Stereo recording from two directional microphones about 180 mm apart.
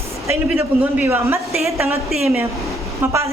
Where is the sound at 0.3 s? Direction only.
10° right (ahead or behind).